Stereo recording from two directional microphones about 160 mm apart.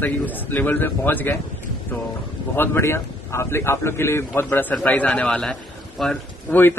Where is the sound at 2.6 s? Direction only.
15° left (ahead or behind).